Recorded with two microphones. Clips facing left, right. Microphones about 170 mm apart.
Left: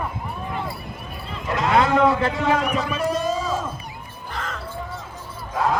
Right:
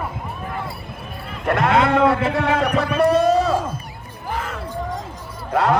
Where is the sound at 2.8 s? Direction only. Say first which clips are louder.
Right 7 dB; 65° right (ahead or behind).